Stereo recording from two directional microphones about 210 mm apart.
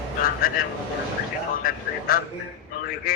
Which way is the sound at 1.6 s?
45° left (ahead or behind).